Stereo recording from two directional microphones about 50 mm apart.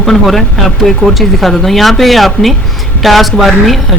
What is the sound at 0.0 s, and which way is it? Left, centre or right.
A woman's voice, centre.